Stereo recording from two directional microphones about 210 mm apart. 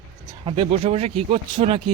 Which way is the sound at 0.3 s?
25° right (ahead or behind).